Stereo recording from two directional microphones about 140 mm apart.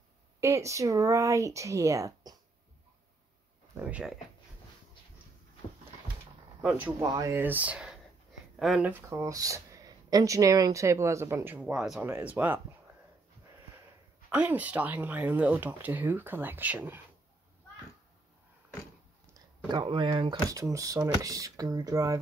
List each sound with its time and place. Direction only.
0.4 s speech: 20° right (ahead or behind)
3.8 s speech: 5° right (ahead or behind)
6.7 s speech: 20° right (ahead or behind)
9.1 s speech: 25° right (ahead or behind)
14.3 s speech: 10° right (ahead or behind)
19.7 s speech: 35° right (ahead or behind)